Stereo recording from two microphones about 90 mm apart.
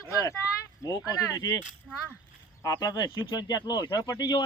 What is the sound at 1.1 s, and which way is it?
Speech, 35° left (ahead or behind).